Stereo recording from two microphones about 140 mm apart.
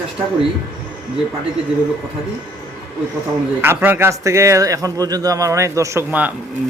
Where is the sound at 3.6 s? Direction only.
15° right (ahead or behind).